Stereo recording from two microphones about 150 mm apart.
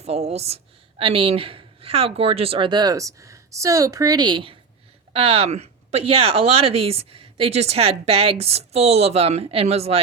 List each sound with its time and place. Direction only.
0.0 s a woman's voice: 45° right (ahead or behind)
5.1 s speech: 40° right (ahead or behind)